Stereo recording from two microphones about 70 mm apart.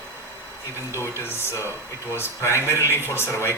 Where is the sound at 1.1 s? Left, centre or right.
Left.